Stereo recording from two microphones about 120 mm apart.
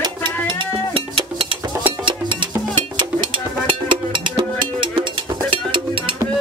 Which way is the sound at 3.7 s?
45° right (ahead or behind).